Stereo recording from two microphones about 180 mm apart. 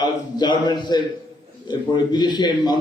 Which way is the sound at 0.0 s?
25° left (ahead or behind).